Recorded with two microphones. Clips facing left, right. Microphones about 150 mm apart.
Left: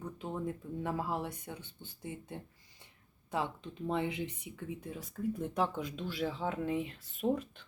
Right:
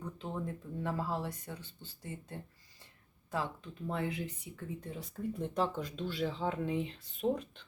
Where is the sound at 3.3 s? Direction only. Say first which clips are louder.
Left 1 dB; 20° left (ahead or behind).